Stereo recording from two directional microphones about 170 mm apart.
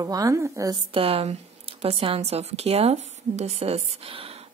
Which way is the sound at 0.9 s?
35° right (ahead or behind).